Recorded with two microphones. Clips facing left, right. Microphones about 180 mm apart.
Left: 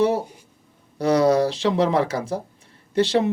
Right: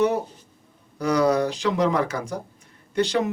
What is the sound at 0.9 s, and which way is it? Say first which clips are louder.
Speech: left 3 dB; 30° left (ahead or behind).